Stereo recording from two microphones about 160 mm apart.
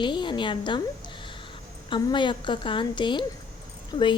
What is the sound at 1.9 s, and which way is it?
A woman's voice, 30° left (ahead or behind).